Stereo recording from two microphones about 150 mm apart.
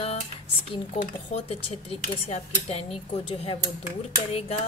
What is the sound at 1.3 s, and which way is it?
Music, 40° left (ahead or behind).